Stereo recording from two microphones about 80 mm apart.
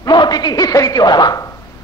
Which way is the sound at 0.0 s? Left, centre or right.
Left.